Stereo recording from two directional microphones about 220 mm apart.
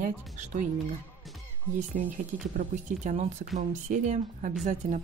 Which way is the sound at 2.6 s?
35° right (ahead or behind).